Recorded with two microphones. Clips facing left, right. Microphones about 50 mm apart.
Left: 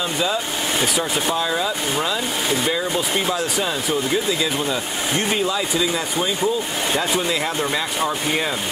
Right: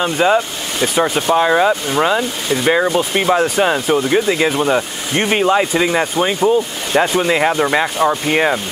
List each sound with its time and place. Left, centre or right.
0.0 s speech: right